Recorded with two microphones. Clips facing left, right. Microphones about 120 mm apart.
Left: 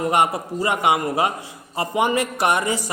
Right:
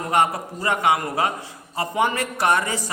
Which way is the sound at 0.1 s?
15° left (ahead or behind).